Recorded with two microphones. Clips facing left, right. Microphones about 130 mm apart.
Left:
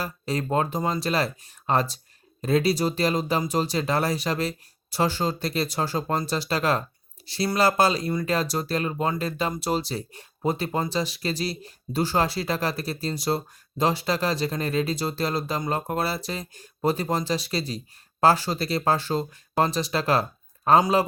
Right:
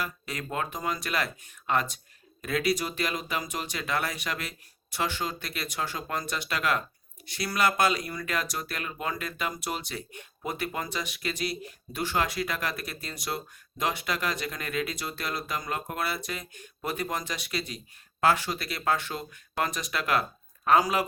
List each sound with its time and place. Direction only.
0.0 s speech: 35° left (ahead or behind)